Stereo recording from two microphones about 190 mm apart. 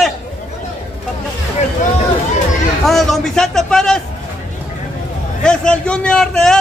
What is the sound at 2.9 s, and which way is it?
A man's voice, centre (ahead or behind).